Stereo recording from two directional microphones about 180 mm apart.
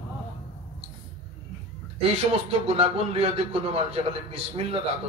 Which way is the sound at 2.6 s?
30° right (ahead or behind).